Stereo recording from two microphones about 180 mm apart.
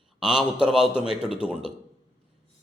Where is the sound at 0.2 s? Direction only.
5° right (ahead or behind).